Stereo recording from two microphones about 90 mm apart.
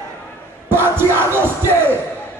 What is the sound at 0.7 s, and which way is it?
Music, 25° right (ahead or behind).